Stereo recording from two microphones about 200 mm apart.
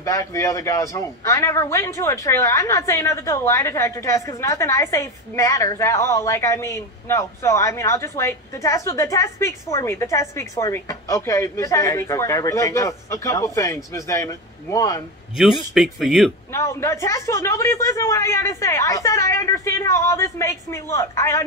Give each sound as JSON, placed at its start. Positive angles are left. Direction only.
{"t": 0.0, "sound": "a man's voice", "side_deg": 15}
{"t": 15.7, "sound": "speech", "side_deg": 0}
{"t": 16.5, "sound": "a man's voice", "side_deg": 15}